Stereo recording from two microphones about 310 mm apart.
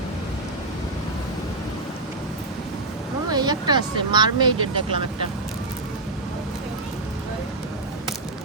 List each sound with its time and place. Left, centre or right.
3.2 s speech: centre